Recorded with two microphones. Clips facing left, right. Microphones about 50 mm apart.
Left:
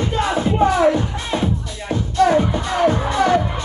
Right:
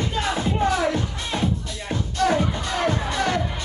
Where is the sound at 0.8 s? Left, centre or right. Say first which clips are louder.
Left 7 dB; left.